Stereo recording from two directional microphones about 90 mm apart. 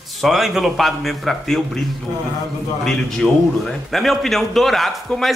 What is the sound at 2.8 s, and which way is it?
A man's voice, 5° left (ahead or behind).